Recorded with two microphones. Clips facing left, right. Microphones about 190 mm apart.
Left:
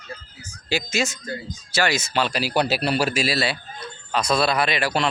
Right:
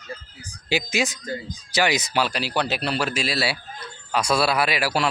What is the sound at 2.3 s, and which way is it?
A man's voice, 10° left (ahead or behind).